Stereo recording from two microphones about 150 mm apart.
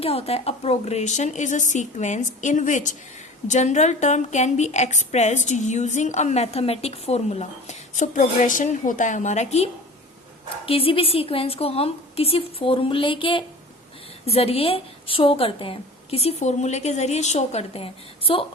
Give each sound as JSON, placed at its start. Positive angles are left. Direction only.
{"t": 0.0, "sound": "a woman's voice", "side_deg": 40}
{"t": 10.7, "sound": "a woman's voice", "side_deg": 40}